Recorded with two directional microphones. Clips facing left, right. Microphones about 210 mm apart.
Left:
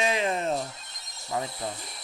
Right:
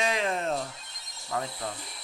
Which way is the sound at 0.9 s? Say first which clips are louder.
Left 2 dB; 40° left (ahead or behind).